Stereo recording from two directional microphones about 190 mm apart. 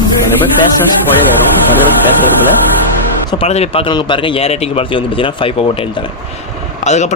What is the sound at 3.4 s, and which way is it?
Speech, 30° left (ahead or behind).